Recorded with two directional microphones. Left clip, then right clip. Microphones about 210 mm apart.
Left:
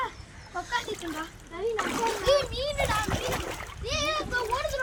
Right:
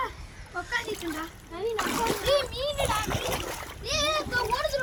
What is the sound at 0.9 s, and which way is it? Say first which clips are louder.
Water: right 1 dB; 40° right (ahead or behind).